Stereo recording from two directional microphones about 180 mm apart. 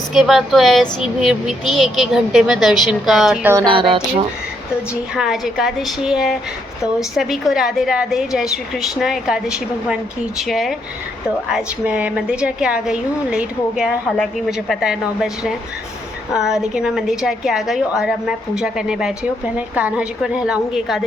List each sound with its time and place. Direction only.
0.1 s a woman's voice: centre (ahead or behind)
3.7 s speech: 30° right (ahead or behind)
5.1 s a woman's voice: centre (ahead or behind)